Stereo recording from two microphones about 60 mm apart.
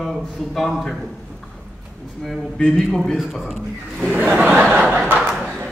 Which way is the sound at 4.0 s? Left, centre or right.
Right.